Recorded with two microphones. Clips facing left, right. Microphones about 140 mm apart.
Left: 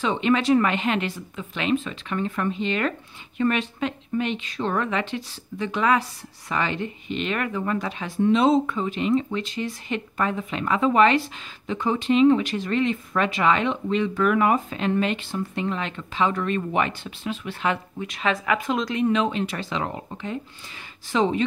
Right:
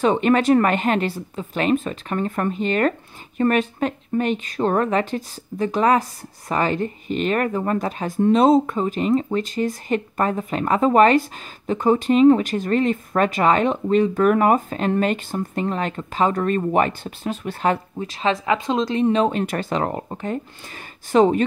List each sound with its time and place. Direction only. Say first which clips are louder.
0.0 s speech: right 5 dB; 50° right (ahead or behind)